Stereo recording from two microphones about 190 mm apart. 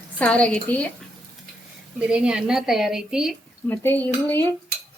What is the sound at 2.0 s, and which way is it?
Speech, 5° right (ahead or behind).